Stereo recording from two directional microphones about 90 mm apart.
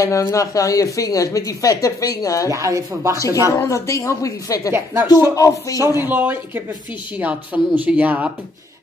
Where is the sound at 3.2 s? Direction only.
40° left (ahead or behind).